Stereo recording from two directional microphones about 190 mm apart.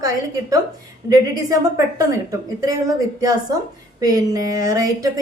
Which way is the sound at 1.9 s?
20° right (ahead or behind).